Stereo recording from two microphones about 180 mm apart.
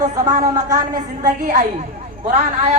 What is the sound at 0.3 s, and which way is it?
Speech, 20° right (ahead or behind).